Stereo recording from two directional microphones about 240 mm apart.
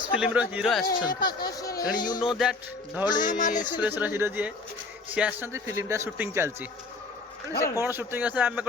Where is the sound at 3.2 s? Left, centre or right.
Left.